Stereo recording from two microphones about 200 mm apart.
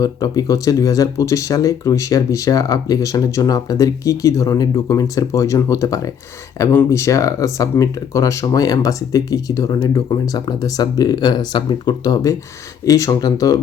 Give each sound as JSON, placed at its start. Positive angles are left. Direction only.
{"t": 0.0, "sound": "speech", "side_deg": 20}